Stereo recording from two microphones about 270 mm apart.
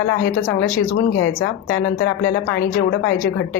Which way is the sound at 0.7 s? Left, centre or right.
Left.